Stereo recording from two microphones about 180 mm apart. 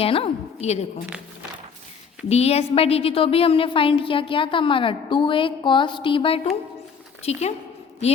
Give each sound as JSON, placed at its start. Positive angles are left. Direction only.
{"t": 0.0, "sound": "a woman's voice", "side_deg": 30}
{"t": 1.0, "sound": "a sound", "side_deg": -10}
{"t": 2.3, "sound": "a woman's voice", "side_deg": 35}